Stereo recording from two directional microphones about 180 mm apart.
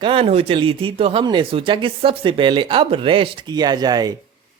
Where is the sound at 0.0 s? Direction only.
30° right (ahead or behind).